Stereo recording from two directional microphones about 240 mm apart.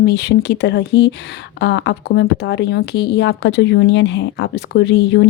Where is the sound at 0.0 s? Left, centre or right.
Left.